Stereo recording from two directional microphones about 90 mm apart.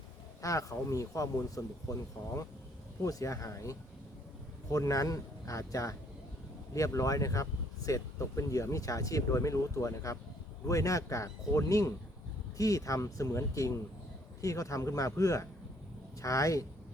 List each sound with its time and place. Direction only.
0.4 s speech: 35° left (ahead or behind)